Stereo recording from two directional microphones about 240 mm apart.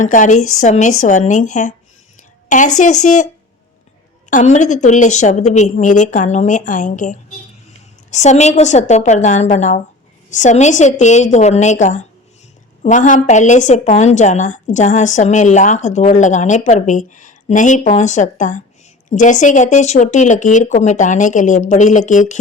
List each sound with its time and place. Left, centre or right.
0.0 s a woman's voice: left
0.3 s a woman's voice: left
0.6 s a woman's voice: left
2.7 s a woman's voice: left
4.3 s a woman's voice: left